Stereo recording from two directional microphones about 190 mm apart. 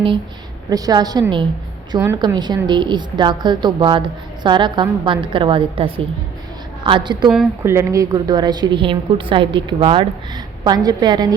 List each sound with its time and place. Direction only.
0.7 s a woman's voice: 20° right (ahead or behind)